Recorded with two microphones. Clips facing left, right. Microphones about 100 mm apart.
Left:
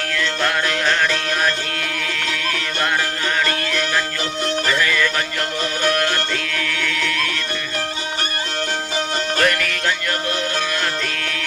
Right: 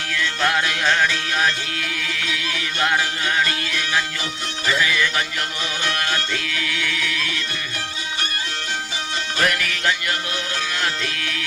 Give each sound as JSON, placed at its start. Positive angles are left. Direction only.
{"t": 0.4, "sound": "music", "side_deg": -5}
{"t": 3.4, "sound": "music", "side_deg": -5}
{"t": 9.4, "sound": "music", "side_deg": -5}